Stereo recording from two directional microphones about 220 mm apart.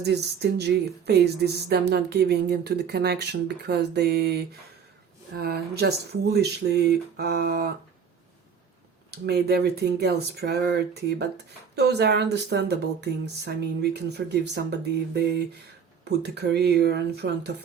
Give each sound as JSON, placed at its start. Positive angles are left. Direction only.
{"t": 0.0, "sound": "speech", "side_deg": -50}
{"t": 9.0, "sound": "speech", "side_deg": -50}